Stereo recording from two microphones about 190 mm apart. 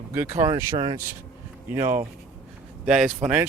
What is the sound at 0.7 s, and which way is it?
Speech, 25° right (ahead or behind).